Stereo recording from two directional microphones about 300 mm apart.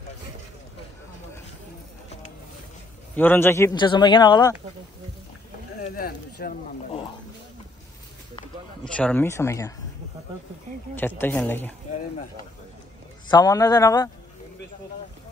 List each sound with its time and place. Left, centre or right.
3.2 s a man's voice: centre
5.8 s a sound: left
8.8 s a man's voice: centre
11.0 s a man's voice: centre
13.3 s a man's voice: centre